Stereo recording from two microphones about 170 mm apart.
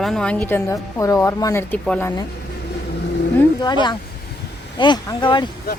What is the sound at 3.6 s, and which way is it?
Speech, 25° left (ahead or behind).